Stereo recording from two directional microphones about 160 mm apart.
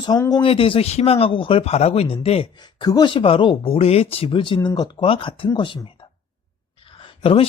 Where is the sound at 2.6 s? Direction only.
25° left (ahead or behind).